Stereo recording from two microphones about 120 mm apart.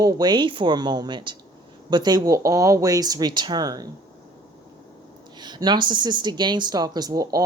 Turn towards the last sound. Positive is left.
turn(degrees=-30)  # may be behind; listen again after turning